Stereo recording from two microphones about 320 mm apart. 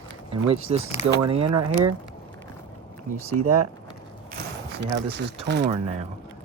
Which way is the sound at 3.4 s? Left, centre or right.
Right.